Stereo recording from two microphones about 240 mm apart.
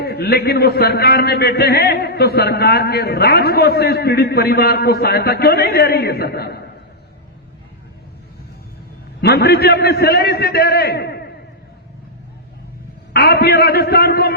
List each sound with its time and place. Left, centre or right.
0.0 s a man's voice: left
9.2 s a man's voice: left
13.1 s a man's voice: left